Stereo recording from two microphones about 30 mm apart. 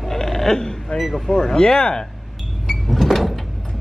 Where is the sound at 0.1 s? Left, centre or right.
Centre.